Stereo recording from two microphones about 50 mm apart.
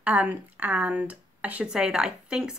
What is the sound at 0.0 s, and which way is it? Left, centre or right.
Speech, right.